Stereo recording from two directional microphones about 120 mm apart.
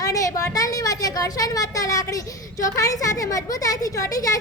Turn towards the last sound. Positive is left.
turn(degrees=30)  # may be behind; listen again after turning